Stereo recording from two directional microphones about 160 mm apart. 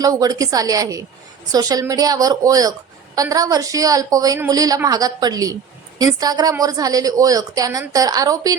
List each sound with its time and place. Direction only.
0.0 s a woman's voice: 25° right (ahead or behind)